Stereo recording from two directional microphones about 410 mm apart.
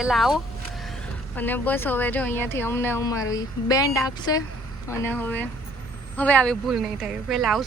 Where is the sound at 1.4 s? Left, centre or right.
Centre.